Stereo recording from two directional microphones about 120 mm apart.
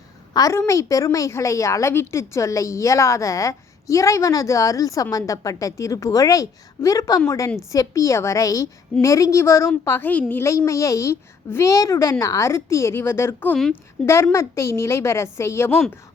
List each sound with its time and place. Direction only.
0.3 s a woman's voice: 25° left (ahead or behind)